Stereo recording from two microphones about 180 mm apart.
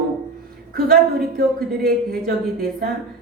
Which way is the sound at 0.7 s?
55° right (ahead or behind).